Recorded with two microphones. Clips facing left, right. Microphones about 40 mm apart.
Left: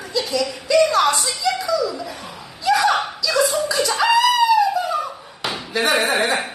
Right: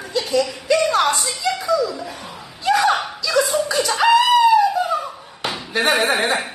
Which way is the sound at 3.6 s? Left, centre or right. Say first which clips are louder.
Even; right.